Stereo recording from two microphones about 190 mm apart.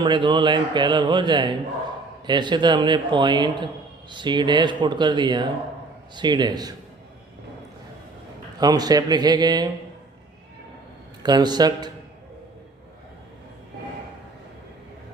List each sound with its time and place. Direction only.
0.0 s speech: 25° right (ahead or behind)
8.5 s speech: 20° right (ahead or behind)
11.2 s speech: 20° right (ahead or behind)